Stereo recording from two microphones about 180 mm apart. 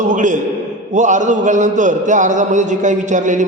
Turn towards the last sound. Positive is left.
turn(degrees=-45)  # may be behind; listen again after turning